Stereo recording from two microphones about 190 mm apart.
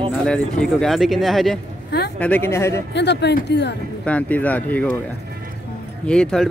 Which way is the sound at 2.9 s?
65° left (ahead or behind).